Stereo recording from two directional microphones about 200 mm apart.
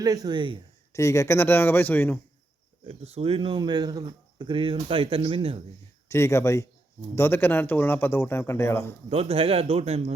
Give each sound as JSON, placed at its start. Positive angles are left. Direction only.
{"t": 0.0, "sound": "speech", "side_deg": -20}
{"t": 0.9, "sound": "speech", "side_deg": 15}
{"t": 2.8, "sound": "speech", "side_deg": -30}
{"t": 6.1, "sound": "speech", "side_deg": 15}
{"t": 9.0, "sound": "speech", "side_deg": -30}